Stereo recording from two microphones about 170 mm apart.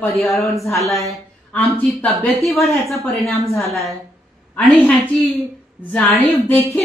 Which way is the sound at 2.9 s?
Centre (ahead or behind).